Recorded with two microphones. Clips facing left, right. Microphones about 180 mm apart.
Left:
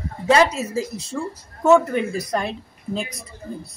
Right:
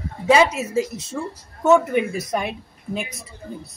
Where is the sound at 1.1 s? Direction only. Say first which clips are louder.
Left 1 dB; 5° right (ahead or behind).